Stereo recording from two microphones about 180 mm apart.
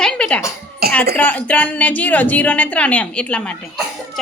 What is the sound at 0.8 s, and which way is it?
Speech, 60° right (ahead or behind).